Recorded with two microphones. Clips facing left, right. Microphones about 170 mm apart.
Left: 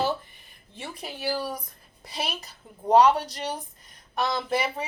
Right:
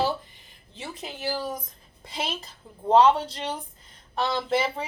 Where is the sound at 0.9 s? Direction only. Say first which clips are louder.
Left 1 dB; 20° right (ahead or behind).